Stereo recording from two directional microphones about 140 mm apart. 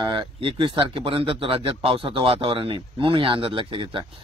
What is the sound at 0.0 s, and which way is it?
Speech, 35° right (ahead or behind).